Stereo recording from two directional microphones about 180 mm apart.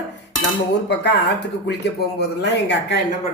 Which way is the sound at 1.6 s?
70° left (ahead or behind).